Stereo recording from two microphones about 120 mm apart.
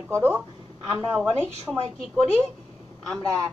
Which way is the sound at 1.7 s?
5° right (ahead or behind).